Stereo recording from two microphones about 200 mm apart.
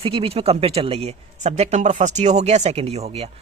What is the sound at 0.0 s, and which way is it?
Speech, 30° right (ahead or behind).